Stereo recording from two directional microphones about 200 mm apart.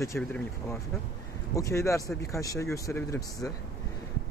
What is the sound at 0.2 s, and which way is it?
Speech, 5° left (ahead or behind).